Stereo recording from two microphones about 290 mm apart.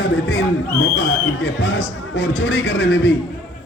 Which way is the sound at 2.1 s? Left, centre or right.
Left.